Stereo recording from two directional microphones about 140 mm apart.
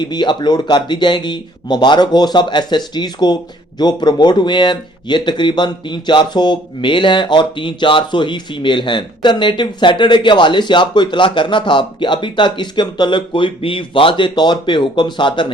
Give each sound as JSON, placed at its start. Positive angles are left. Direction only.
{"t": 0.0, "sound": "speech", "side_deg": 30}